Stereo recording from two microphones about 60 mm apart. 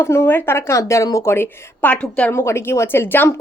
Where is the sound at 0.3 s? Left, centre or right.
Left.